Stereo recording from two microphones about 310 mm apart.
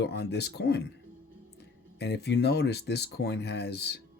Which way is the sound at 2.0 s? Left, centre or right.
Left.